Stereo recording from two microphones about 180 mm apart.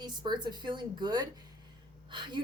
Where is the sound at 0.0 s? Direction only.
25° right (ahead or behind).